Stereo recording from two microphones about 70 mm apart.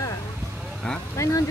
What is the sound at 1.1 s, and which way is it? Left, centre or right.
Speech, left.